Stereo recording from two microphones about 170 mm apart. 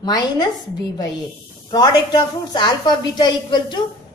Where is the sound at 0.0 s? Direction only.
25° left (ahead or behind).